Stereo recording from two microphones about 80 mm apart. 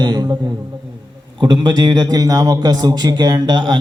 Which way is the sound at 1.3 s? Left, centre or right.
Right.